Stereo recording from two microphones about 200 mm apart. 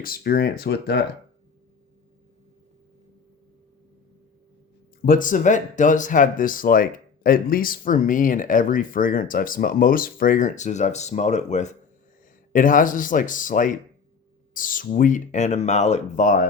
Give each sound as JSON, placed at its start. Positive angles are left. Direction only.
{"t": 0.0, "sound": "speech", "side_deg": 50}
{"t": 5.0, "sound": "speech", "side_deg": 40}